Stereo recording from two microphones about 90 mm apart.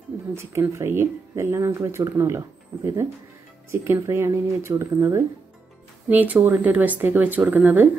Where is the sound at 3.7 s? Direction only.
30° right (ahead or behind).